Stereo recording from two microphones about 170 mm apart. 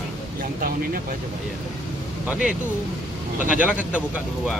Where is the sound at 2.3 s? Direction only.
5° right (ahead or behind).